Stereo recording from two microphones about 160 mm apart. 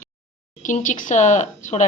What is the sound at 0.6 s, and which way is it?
A woman's voice, 50° left (ahead or behind).